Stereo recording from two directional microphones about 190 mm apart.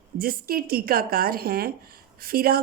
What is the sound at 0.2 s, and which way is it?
A woman's voice, 50° right (ahead or behind).